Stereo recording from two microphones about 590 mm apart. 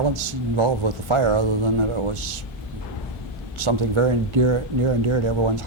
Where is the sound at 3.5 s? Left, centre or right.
Right.